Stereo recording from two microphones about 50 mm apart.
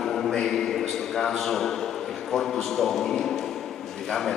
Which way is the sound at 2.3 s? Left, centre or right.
Centre.